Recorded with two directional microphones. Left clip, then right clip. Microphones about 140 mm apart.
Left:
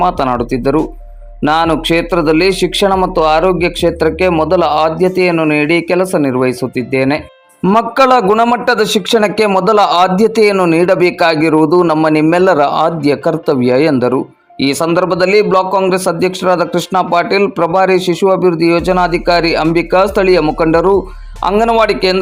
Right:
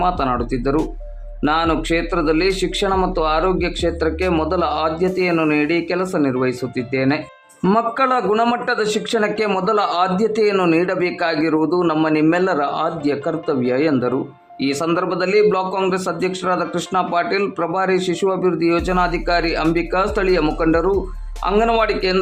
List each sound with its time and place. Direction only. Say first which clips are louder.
0.0 s speech: left 6 dB; 30° left (ahead or behind)